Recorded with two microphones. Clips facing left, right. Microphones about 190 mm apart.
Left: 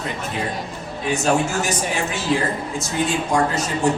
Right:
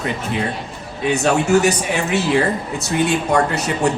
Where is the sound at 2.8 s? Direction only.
65° right (ahead or behind).